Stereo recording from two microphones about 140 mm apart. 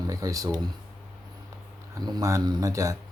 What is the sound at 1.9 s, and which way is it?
Speech, 25° right (ahead or behind).